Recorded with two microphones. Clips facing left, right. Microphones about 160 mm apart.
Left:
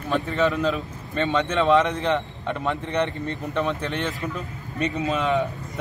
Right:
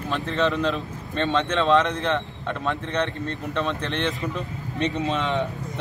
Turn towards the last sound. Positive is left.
turn(degrees=5)  # may be behind; listen again after turning